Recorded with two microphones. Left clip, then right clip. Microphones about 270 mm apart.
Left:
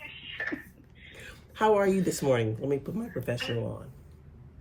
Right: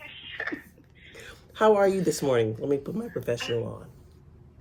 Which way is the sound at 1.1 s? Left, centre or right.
Centre.